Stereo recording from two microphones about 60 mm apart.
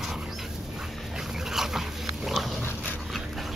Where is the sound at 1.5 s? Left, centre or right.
Centre.